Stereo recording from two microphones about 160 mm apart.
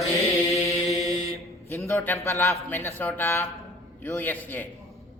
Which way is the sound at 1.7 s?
15° left (ahead or behind).